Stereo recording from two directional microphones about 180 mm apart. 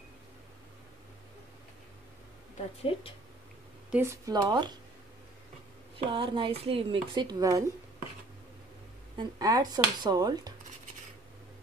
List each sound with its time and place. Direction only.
2.5 s speech: 35° left (ahead or behind)
3.9 s speech: 15° right (ahead or behind)
5.9 s speech: 30° right (ahead or behind)
9.1 s speech: 25° right (ahead or behind)